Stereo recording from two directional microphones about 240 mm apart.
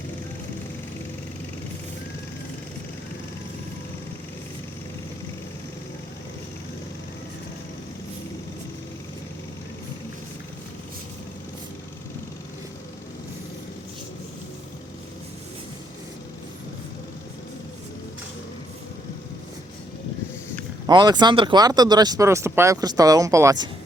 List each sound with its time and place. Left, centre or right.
20.8 s speech: centre